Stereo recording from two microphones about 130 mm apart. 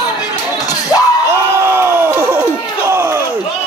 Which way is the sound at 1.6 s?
20° right (ahead or behind).